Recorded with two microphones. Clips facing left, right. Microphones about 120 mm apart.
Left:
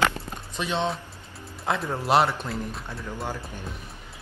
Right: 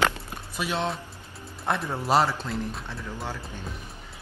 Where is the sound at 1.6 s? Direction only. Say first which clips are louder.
Left 1 dB; centre (ahead or behind).